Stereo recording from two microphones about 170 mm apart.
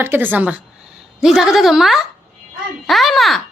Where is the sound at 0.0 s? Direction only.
10° right (ahead or behind).